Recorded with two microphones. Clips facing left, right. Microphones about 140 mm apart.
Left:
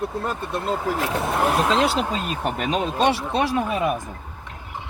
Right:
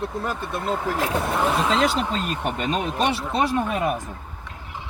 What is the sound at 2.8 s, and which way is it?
Speech, 25° left (ahead or behind).